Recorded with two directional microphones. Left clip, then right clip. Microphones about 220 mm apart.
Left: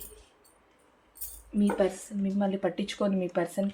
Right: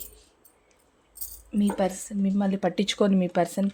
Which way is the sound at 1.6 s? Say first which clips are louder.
Right 1 dB; 55° right (ahead or behind).